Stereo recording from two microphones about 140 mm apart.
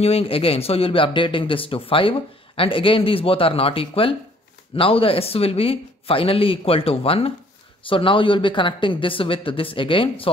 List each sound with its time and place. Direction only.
0.0 s a man's voice: 45° left (ahead or behind)